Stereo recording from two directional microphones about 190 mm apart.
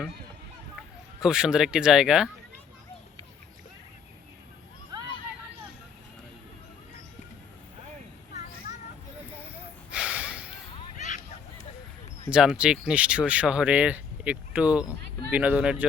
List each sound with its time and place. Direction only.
1.2 s speech: 5° right (ahead or behind)
9.6 s snort: 5° right (ahead or behind)
10.9 s honk: 40° left (ahead or behind)
12.5 s speech: 5° right (ahead or behind)